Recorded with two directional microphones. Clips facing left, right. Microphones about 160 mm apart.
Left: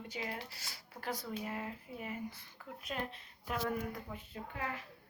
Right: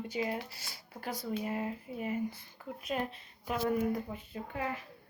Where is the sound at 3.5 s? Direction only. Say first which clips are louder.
Right 5 dB; 10° right (ahead or behind).